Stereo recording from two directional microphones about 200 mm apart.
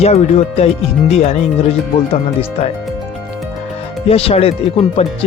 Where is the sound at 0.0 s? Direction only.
30° left (ahead or behind).